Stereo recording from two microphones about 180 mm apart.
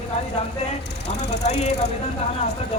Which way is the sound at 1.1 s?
40° left (ahead or behind).